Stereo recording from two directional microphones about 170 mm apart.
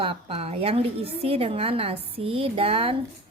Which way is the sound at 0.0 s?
30° right (ahead or behind).